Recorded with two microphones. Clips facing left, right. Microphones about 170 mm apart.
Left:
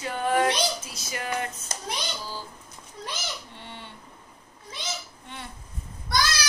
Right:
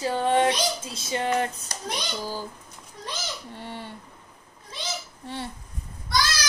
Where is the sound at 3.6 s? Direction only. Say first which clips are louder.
Right 6 dB; 40° right (ahead or behind).